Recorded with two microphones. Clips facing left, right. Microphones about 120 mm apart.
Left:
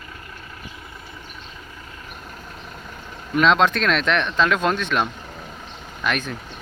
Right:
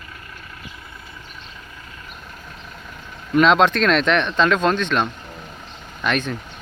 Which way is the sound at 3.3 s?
Centre (ahead or behind).